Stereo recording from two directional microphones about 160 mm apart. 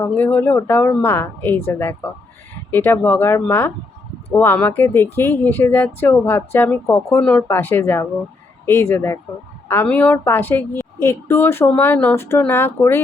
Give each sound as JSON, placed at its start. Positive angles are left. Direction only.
{"t": 0.2, "sound": "a woman's voice", "side_deg": 10}